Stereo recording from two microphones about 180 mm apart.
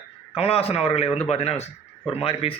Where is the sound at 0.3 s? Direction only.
35° left (ahead or behind).